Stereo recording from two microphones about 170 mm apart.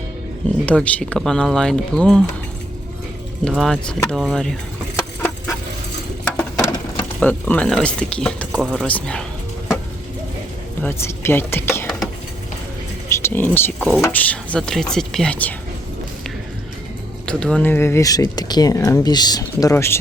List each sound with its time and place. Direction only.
0.6 s speech: 10° left (ahead or behind)
3.5 s speech: centre (ahead or behind)
6.2 s a sound: 15° left (ahead or behind)
7.2 s speech: 10° left (ahead or behind)
8.6 s speech: 5° right (ahead or behind)
8.9 s speech: 5° left (ahead or behind)
10.8 s speech: 15° left (ahead or behind)
13.1 s speech: 15° left (ahead or behind)
13.7 s speech: centre (ahead or behind)
14.0 s speech: 10° left (ahead or behind)
17.2 s speech: 5° left (ahead or behind)